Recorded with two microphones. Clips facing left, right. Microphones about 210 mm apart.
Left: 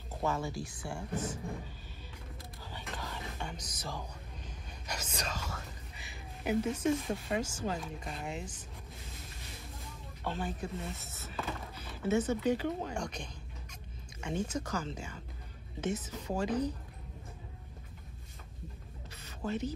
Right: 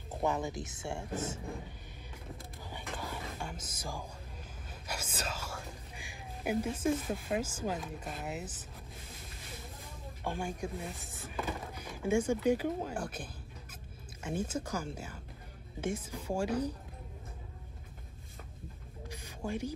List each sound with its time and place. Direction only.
0.1 s speech: 15° right (ahead or behind)
2.7 s whispering: 15° right (ahead or behind)
4.8 s speech: 5° right (ahead or behind)
10.2 s speech: 10° right (ahead or behind)
19.0 s a sound: 10° right (ahead or behind)